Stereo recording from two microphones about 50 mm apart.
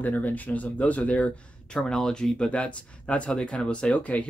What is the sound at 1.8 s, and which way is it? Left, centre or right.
Speech, centre.